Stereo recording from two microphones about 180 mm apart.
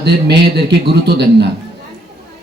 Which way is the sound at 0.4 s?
70° right (ahead or behind).